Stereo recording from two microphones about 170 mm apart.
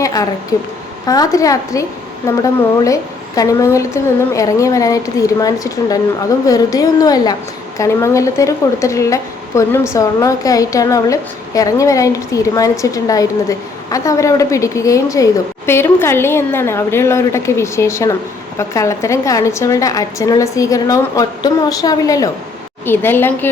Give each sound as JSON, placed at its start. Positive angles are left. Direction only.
{"t": 0.0, "sound": "a woman's voice", "side_deg": 20}